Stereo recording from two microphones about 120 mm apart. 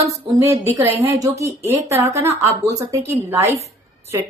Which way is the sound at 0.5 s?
20° right (ahead or behind).